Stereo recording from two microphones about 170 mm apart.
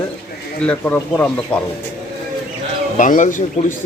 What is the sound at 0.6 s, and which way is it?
Speech, 10° left (ahead or behind).